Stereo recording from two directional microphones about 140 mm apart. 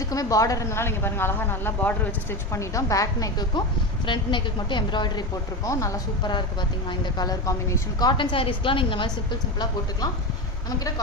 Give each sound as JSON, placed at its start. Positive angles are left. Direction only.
{"t": 0.0, "sound": "a woman's voice", "side_deg": 25}
{"t": 5.6, "sound": "speech", "side_deg": 20}
{"t": 10.8, "sound": "a woman's voice", "side_deg": 25}